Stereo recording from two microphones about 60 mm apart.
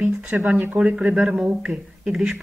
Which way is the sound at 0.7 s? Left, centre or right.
Centre.